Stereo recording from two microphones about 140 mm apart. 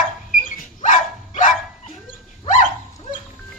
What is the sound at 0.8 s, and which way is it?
Dog, 65° left (ahead or behind).